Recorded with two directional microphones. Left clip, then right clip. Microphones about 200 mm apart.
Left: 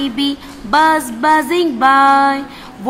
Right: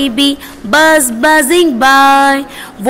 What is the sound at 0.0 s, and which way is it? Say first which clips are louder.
Music: right 6 dB; 20° right (ahead or behind).